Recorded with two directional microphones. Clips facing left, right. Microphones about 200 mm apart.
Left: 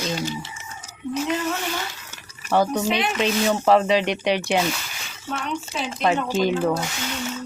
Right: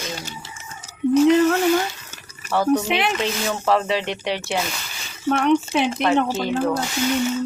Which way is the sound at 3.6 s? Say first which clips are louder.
Left 2 dB; 15° left (ahead or behind).